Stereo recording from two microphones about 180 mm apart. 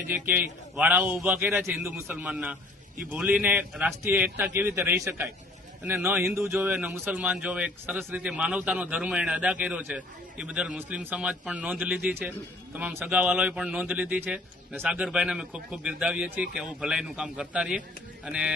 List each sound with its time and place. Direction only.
0.1 s speech: 10° right (ahead or behind)